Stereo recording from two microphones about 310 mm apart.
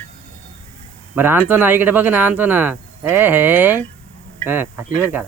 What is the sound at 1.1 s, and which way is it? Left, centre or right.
Speech, centre.